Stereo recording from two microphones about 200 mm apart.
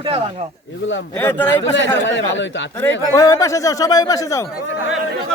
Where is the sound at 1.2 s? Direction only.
10° left (ahead or behind).